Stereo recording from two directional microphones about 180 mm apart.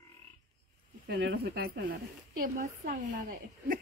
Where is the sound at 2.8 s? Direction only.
50° right (ahead or behind).